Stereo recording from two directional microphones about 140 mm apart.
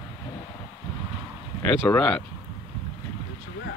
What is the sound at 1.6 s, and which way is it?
Speech, 15° left (ahead or behind).